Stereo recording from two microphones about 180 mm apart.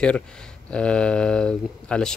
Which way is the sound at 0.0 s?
5° left (ahead or behind).